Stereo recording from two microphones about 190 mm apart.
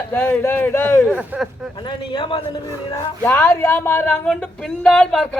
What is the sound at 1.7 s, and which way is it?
Speech, 25° left (ahead or behind).